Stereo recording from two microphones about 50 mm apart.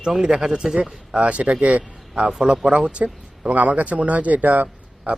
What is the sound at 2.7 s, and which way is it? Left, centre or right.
Speech, right.